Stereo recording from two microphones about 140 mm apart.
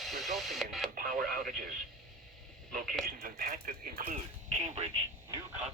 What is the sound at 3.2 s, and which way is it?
Speech, 85° right.